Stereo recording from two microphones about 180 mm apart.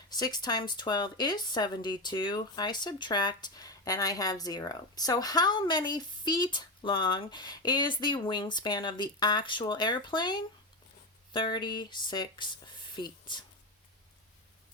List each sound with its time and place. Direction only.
0.1 s speech: 20° left (ahead or behind)